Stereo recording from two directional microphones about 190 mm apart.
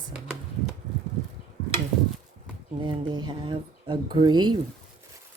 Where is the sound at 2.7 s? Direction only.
25° right (ahead or behind).